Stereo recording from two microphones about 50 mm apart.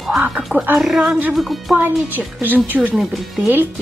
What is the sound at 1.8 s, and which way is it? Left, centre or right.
A woman's voice, right.